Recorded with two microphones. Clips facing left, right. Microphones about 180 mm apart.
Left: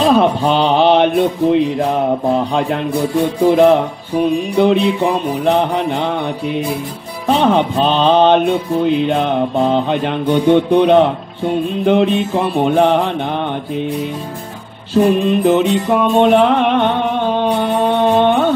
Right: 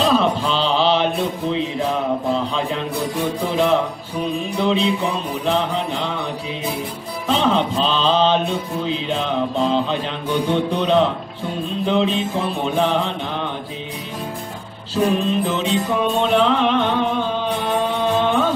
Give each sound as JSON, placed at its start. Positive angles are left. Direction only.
{"t": 0.0, "sound": "a sound", "side_deg": 55}
{"t": 3.4, "sound": "music", "side_deg": 55}
{"t": 15.2, "sound": "music", "side_deg": 60}